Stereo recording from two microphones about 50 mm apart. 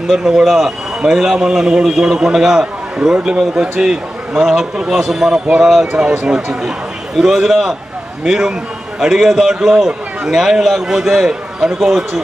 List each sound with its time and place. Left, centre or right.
0.1 s a man's voice: centre
5.9 s a man's voice: centre
11.8 s a man's voice: centre